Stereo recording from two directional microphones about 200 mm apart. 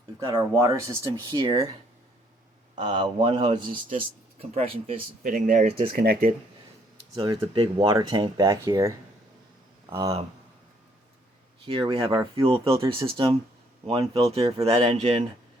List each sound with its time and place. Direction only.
0.3 s speech: 15° right (ahead or behind)
2.7 s speech: 25° right (ahead or behind)
5.9 s speech: 50° right (ahead or behind)
7.2 s speech: 25° right (ahead or behind)
11.6 s speech: 25° right (ahead or behind)